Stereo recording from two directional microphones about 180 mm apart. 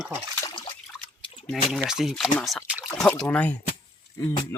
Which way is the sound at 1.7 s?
Centre (ahead or behind).